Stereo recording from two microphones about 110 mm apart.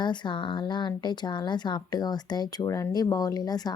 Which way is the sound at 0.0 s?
45° left (ahead or behind).